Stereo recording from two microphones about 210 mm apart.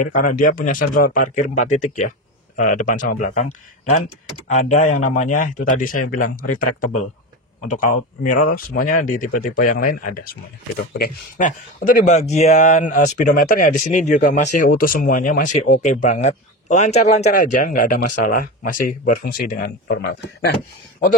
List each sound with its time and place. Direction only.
0.0 s speech: 40° left (ahead or behind)
4.6 s speech: 35° left (ahead or behind); by 20.5 s 55° left (ahead or behind)